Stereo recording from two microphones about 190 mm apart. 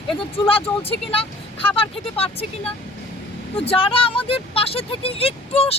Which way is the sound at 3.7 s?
30° left (ahead or behind).